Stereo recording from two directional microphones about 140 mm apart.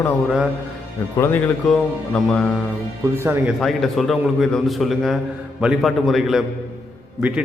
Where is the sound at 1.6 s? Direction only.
5° left (ahead or behind).